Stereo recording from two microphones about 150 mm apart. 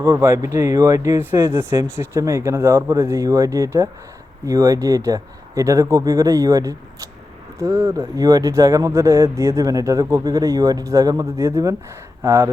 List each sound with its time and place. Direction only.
0.0 s speech: 20° right (ahead or behind)